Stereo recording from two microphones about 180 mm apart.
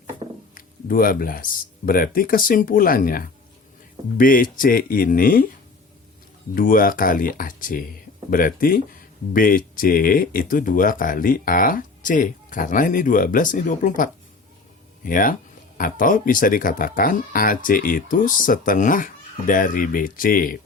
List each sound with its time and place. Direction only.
0.5 s speech: 50° left (ahead or behind)
6.5 s speech: 50° left (ahead or behind)